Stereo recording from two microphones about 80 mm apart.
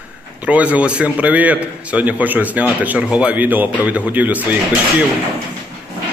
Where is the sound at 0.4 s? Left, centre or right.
Centre.